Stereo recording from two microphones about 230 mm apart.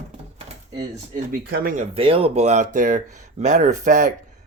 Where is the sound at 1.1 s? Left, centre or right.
Right.